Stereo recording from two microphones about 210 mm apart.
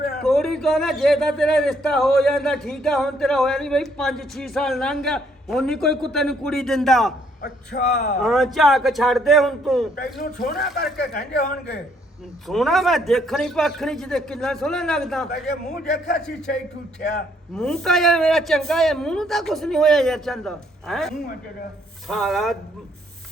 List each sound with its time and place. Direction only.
0.2 s speech: centre (ahead or behind)
7.4 s a man's voice: 45° left (ahead or behind)
8.2 s speech: centre (ahead or behind)
10.2 s a man's voice: 45° left (ahead or behind)
12.5 s speech: centre (ahead or behind)
15.6 s a man's voice: 40° left (ahead or behind)
17.5 s speech: 5° left (ahead or behind)